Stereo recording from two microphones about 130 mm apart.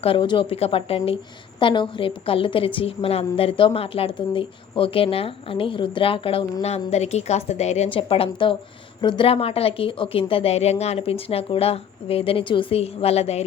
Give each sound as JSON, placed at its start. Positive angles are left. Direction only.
{"t": 0.0, "sound": "a woman's voice", "side_deg": 40}
{"t": 7.9, "sound": "a woman's voice", "side_deg": 45}